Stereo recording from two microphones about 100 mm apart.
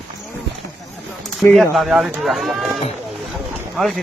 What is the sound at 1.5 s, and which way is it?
Speech, centre (ahead or behind).